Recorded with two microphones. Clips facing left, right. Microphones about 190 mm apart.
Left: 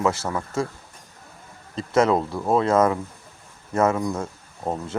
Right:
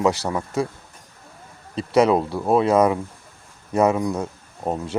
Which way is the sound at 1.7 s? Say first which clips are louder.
Right 2 dB; 15° right (ahead or behind).